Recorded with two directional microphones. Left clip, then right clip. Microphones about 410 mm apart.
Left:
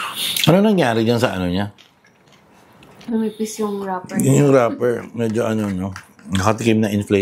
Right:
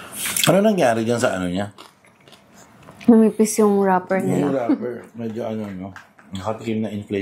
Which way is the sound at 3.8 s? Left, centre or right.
Right.